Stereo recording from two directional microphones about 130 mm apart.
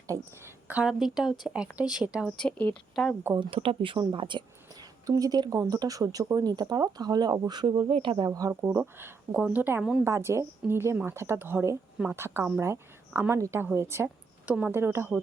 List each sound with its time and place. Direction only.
0.1 s a woman's voice: 20° right (ahead or behind)
0.8 s speech: 5° right (ahead or behind)
2.4 s speech: 10° left (ahead or behind)
3.3 s a woman's voice: 40° right (ahead or behind); by 15.2 s 15° right (ahead or behind)